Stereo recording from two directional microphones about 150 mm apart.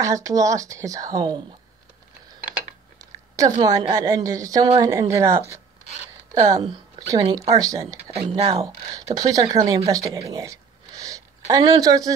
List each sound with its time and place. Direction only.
0.0 s speech: 20° right (ahead or behind)
3.0 s a sound: 20° right (ahead or behind)
3.3 s speech: 25° right (ahead or behind)
6.5 s speech: 30° right (ahead or behind)
8.1 s speech: 40° right (ahead or behind)
8.9 s speech: 25° right (ahead or behind)
10.3 s a sound: 25° right (ahead or behind)
11.7 s speech: 25° right (ahead or behind)